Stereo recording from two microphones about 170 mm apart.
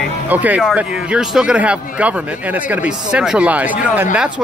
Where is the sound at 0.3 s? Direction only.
10° right (ahead or behind).